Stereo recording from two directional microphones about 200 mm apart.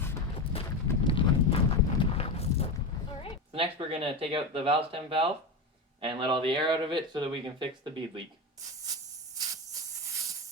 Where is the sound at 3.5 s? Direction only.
25° right (ahead or behind).